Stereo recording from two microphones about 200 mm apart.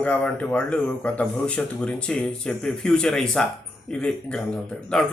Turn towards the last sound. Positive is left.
turn(degrees=5)  # may be behind; listen again after turning